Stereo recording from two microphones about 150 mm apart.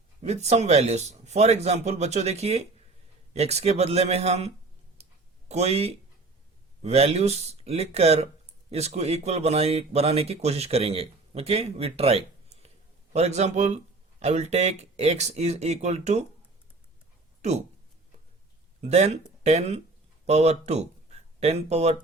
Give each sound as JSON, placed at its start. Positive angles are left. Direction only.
{"t": 0.2, "sound": "speech", "side_deg": -45}
{"t": 5.0, "sound": "a sound", "side_deg": -45}
{"t": 5.5, "sound": "speech", "side_deg": -45}
{"t": 17.4, "sound": "speech", "side_deg": -50}
{"t": 18.8, "sound": "speech", "side_deg": -45}